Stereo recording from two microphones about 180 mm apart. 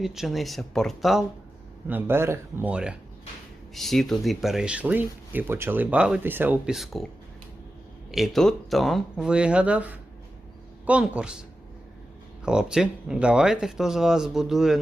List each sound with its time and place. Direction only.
0.0 s speech: centre (ahead or behind)
1.9 s speech: 10° right (ahead or behind)
8.1 s speech: centre (ahead or behind)
12.5 s speech: 5° right (ahead or behind)